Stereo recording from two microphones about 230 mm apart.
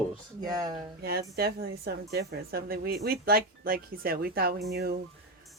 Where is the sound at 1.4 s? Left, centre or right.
Right.